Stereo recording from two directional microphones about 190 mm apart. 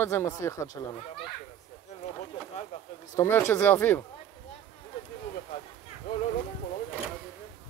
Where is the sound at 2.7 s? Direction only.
35° left (ahead or behind).